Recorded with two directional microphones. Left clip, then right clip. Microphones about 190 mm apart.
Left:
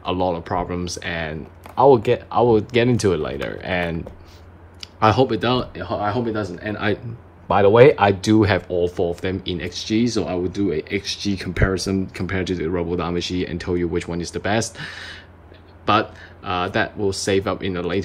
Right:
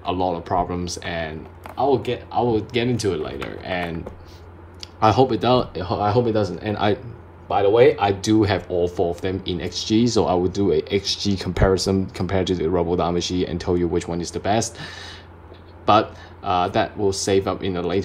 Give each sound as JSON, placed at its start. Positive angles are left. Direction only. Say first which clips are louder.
{"t": 0.0, "sound": "speech", "louder": "left 1 dB", "side_deg": 0}
{"t": 1.8, "sound": "speech", "louder": "left 6 dB", "side_deg": 15}
{"t": 5.8, "sound": "speech", "louder": "right 3 dB", "side_deg": -20}
{"t": 7.4, "sound": "speech", "louder": "left 3 dB", "side_deg": 15}